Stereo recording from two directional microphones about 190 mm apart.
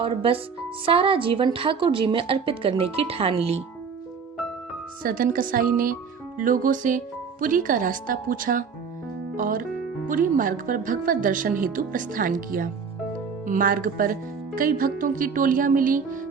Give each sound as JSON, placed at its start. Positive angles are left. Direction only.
{"t": 0.0, "sound": "a woman's voice", "side_deg": -30}
{"t": 5.0, "sound": "speech", "side_deg": -50}